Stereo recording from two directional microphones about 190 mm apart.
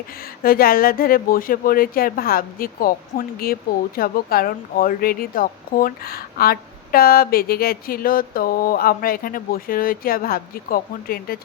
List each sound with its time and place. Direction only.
0.4 s speech: 50° left (ahead or behind)